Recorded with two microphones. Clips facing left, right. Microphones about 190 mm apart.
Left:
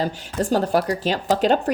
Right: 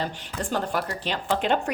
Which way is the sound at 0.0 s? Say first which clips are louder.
Left 7 dB; 40° left (ahead or behind).